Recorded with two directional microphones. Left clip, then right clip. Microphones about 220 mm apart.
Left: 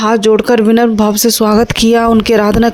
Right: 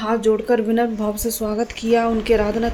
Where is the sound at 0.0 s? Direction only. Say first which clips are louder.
Left 9 dB; 40° left (ahead or behind).